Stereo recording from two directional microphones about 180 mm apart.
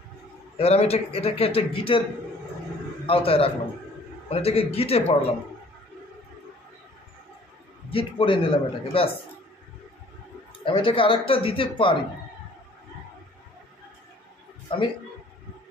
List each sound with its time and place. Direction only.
0.6 s a man's voice: 35° left (ahead or behind)
3.1 s a man's voice: 30° left (ahead or behind)
7.9 s a man's voice: 30° left (ahead or behind)
10.6 s speech: 30° left (ahead or behind)